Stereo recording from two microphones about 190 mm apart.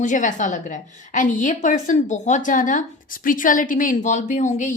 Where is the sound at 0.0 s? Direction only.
40° left (ahead or behind).